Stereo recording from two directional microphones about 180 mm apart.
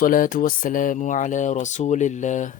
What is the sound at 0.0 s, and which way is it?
Speech, 50° left (ahead or behind).